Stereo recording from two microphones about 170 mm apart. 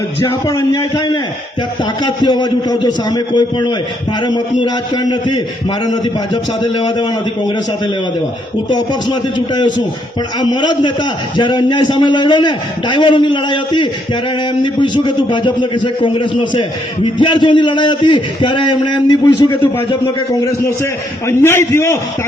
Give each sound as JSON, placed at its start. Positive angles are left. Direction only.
{"t": 0.4, "sound": "a man's voice", "side_deg": 20}
{"t": 6.3, "sound": "a man's voice", "side_deg": 25}
{"t": 10.4, "sound": "a man's voice", "side_deg": 25}
{"t": 21.2, "sound": "a man's voice", "side_deg": 15}